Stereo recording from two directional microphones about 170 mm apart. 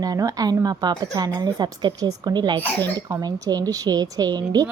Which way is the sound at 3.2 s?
25° right (ahead or behind).